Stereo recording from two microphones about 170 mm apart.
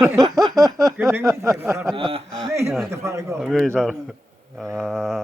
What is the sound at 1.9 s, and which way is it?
Speech, 30° right (ahead or behind).